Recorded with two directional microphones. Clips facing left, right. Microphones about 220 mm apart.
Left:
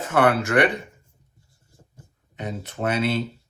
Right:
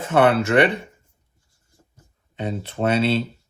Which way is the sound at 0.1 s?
25° right (ahead or behind).